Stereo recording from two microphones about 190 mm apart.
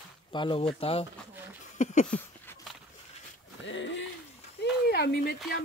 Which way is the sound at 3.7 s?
70° left (ahead or behind).